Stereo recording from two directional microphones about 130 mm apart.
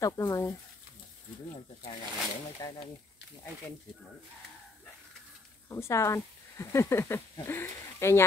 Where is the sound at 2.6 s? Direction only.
35° left (ahead or behind).